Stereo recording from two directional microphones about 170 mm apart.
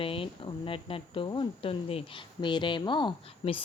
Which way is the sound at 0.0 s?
30° left (ahead or behind).